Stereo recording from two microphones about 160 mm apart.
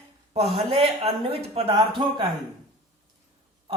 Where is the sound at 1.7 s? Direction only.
30° right (ahead or behind).